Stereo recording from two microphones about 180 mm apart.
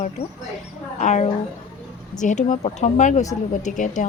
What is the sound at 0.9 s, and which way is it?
Speech, 40° left (ahead or behind).